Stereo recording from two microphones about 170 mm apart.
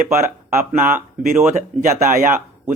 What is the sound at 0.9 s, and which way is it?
Speech, 15° right (ahead or behind).